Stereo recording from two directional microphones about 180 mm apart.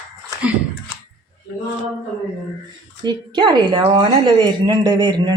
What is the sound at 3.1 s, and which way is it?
A woman's voice, 25° right (ahead or behind).